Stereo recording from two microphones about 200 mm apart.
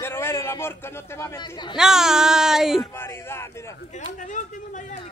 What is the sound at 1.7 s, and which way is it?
Speech, centre (ahead or behind).